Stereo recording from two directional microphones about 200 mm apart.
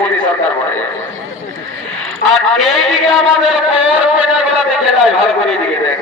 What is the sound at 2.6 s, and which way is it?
Speech, centre (ahead or behind).